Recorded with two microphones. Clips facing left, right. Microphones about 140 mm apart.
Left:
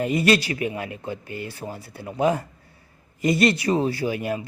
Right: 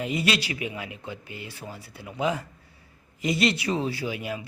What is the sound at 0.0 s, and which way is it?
Speech, 50° left (ahead or behind).